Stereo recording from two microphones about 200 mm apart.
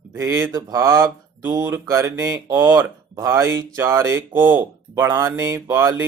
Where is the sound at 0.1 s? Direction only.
15° right (ahead or behind).